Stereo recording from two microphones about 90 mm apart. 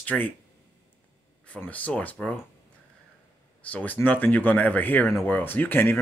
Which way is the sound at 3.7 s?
20° left (ahead or behind).